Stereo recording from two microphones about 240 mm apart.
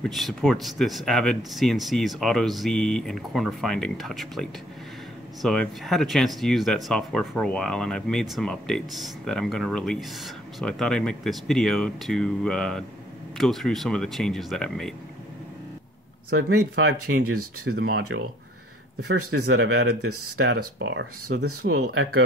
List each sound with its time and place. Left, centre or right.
0.0 s speech: centre
16.3 s speech: right
17.6 s speech: right
19.3 s speech: right
21.5 s speech: right